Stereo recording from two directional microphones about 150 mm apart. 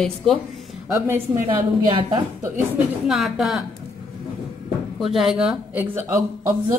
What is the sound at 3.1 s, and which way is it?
Speech, 5° right (ahead or behind).